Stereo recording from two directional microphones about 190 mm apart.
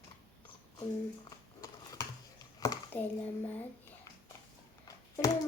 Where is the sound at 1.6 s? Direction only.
20° left (ahead or behind).